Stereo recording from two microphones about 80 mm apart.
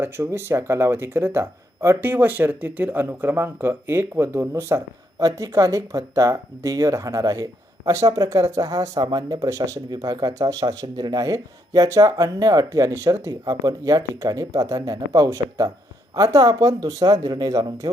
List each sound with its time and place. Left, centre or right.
0.0 s speech: right
5.2 s speech: right
9.9 s speech: right
13.4 s speech: right